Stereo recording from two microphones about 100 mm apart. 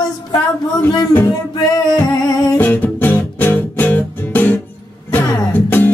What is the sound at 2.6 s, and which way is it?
Music, 20° left (ahead or behind).